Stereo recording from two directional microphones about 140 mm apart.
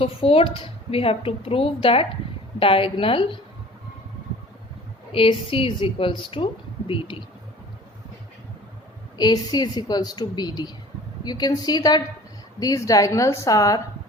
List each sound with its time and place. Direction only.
0.0 s speech: 40° left (ahead or behind)
5.1 s speech: 40° left (ahead or behind)
9.1 s a woman's voice: 30° left (ahead or behind)